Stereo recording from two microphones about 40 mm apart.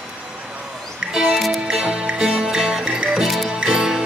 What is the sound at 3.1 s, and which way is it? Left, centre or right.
Music, centre.